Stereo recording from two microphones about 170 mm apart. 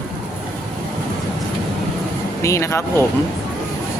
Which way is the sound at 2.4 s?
15° left (ahead or behind).